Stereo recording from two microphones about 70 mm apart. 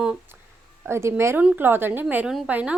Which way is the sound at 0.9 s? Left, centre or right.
Right.